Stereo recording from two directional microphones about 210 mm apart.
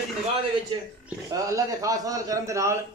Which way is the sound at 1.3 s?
15° right (ahead or behind).